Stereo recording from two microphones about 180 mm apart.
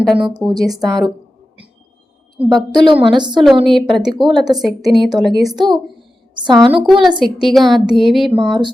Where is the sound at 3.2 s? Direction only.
25° right (ahead or behind).